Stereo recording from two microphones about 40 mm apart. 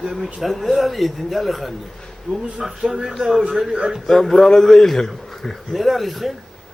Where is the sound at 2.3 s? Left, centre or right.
Centre.